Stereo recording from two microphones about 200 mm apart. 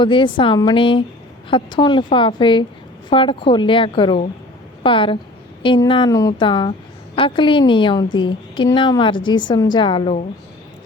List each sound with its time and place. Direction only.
0.0 s a woman's voice: 25° left (ahead or behind)